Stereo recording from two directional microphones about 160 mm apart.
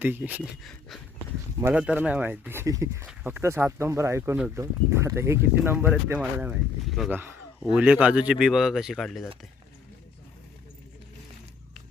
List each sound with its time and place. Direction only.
0.0 s speech: 10° right (ahead or behind)
0.6 s speech: centre (ahead or behind); by 3.1 s 15° right (ahead or behind)
3.1 s speech: 5° right (ahead or behind)
7.1 s speech: 15° right (ahead or behind)